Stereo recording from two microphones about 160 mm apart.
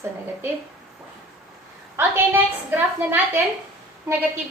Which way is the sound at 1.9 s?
15° right (ahead or behind).